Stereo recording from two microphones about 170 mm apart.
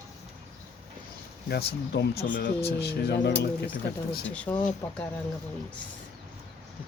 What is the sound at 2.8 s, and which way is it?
Speech, 85° left.